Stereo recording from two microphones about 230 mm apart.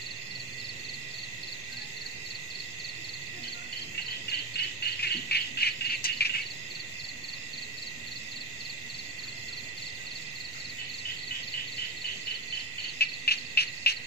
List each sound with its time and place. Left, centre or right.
4.6 s insect: left
13.0 s cricket: left